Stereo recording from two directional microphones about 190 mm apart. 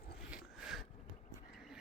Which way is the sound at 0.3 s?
5° right (ahead or behind).